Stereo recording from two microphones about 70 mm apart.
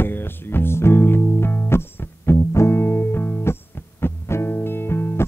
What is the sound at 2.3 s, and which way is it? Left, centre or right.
Music, left.